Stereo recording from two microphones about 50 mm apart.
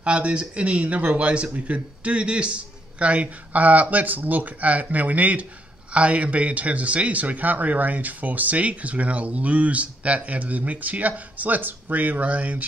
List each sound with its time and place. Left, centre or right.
0.0 s a man's voice: right